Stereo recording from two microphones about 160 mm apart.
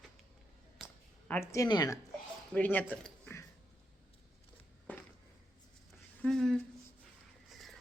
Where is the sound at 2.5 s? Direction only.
10° left (ahead or behind).